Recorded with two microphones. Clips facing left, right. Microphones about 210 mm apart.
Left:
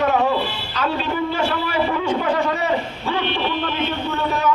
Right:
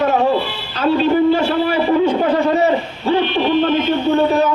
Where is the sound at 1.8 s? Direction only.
35° right (ahead or behind).